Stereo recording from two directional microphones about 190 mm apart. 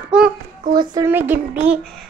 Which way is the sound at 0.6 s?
50° right (ahead or behind).